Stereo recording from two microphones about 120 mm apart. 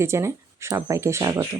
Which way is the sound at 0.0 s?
25° right (ahead or behind).